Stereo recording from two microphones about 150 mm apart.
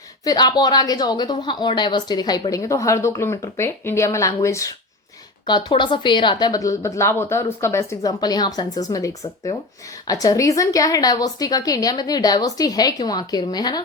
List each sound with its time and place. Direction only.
0.3 s a woman's voice: 25° left (ahead or behind)